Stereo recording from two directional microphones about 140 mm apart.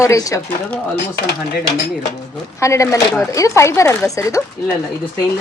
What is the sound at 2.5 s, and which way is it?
Speech, 20° left (ahead or behind).